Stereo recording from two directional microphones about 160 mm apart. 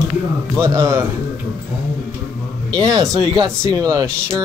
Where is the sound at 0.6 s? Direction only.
20° right (ahead or behind).